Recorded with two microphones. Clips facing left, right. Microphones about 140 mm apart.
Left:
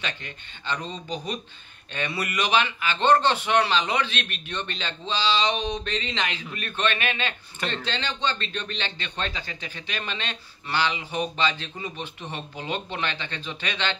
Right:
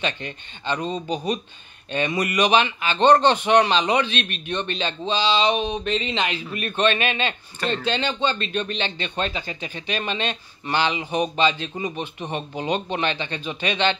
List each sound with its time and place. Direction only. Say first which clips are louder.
0.0 s a man's voice: right 7 dB; 20° right (ahead or behind)